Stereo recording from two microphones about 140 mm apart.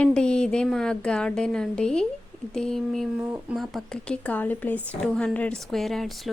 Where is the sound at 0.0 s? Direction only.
5° left (ahead or behind).